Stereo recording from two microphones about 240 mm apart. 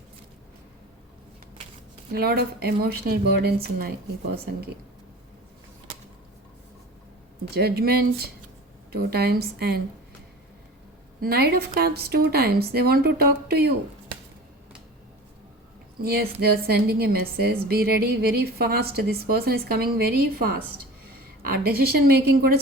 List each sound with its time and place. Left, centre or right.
2.1 s a woman's voice: right
7.5 s a woman's voice: right
11.2 s a woman's voice: right
16.0 s a woman's voice: right